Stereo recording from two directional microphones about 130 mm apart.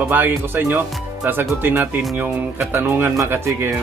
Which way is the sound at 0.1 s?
15° right (ahead or behind).